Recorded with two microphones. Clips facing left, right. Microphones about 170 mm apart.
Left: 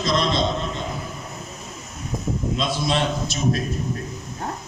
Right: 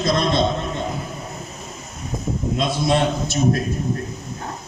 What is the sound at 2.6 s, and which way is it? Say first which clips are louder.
Speech: right 5 dB; 55° right (ahead or behind).